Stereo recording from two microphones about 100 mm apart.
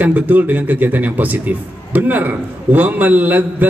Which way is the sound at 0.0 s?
15° right (ahead or behind).